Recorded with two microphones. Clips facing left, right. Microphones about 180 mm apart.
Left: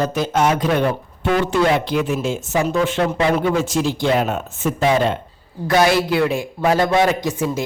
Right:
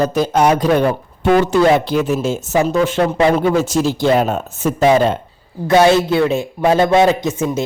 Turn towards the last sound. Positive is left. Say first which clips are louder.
# right 3 dB
turn(degrees=-20)  # may be behind; listen again after turning